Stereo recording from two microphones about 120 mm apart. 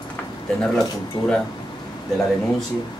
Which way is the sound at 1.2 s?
40° left (ahead or behind).